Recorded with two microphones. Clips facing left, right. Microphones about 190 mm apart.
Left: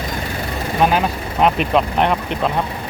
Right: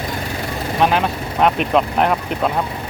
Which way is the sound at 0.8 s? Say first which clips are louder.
Even; 5° left (ahead or behind).